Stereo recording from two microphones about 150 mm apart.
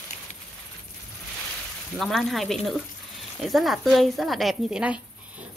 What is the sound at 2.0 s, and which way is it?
A woman's voice, centre (ahead or behind).